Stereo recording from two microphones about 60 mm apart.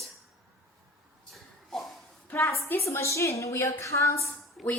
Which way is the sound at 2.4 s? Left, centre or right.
Left.